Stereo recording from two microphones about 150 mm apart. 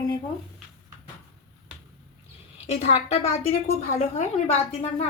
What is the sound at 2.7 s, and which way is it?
A woman's voice, 40° left (ahead or behind).